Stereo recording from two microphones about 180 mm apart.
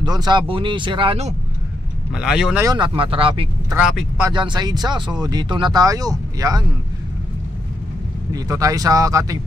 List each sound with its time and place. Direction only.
0.0 s speech: 25° right (ahead or behind)
2.1 s speech: 5° right (ahead or behind)
2.6 s speech: 25° right (ahead or behind)
3.7 s speech: 5° right (ahead or behind)
4.3 s speech: 25° right (ahead or behind)
8.3 s speech: 20° right (ahead or behind)